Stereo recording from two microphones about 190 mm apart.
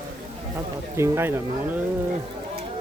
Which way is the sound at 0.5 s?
15° right (ahead or behind).